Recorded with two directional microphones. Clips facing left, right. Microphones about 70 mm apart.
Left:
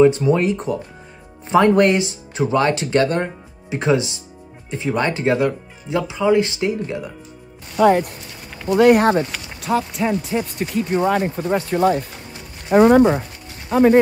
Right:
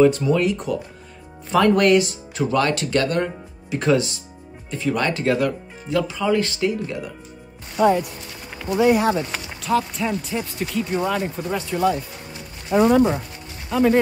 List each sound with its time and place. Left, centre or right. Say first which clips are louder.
0.0 s speech: left 2 dB; left
8.7 s speech: left 5 dB; left
9.7 s speech: left 2 dB; left
11.0 s speech: left 6 dB; left
12.7 s speech: left 4 dB; left
13.7 s speech: left 4 dB; left